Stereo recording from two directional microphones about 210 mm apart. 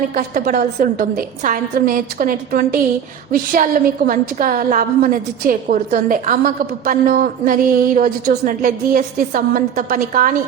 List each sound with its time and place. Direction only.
0.2 s a woman's voice: 40° right (ahead or behind)